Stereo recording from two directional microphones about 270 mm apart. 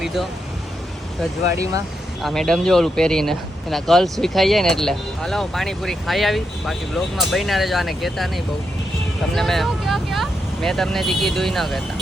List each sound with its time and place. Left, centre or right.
0.0 s speech: centre
2.2 s speech: centre
9.3 s speech: centre